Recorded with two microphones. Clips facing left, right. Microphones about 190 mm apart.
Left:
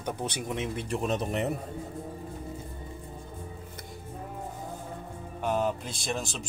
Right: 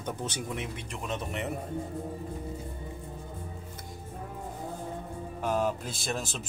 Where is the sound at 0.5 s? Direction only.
30° left (ahead or behind).